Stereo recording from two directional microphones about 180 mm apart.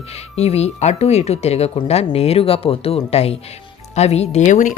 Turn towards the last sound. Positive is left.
turn(degrees=45)  # may be behind; listen again after turning